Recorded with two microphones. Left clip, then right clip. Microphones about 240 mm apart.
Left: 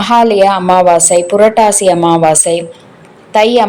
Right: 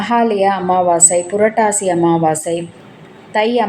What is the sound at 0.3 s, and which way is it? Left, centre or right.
A woman's voice, left.